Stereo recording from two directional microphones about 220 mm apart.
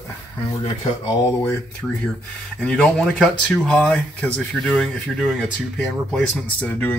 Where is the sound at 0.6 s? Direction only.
25° left (ahead or behind).